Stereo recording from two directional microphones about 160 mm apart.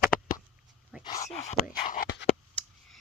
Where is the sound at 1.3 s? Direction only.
45° left (ahead or behind).